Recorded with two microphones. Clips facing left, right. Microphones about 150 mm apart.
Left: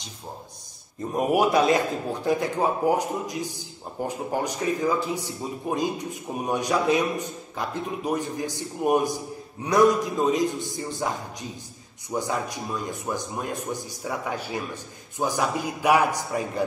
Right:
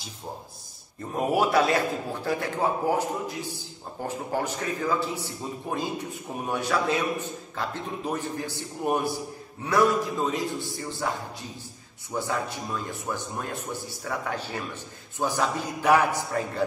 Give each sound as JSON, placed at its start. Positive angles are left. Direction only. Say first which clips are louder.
{"t": 1.1, "sound": "speech", "louder": "left 2 dB", "side_deg": 15}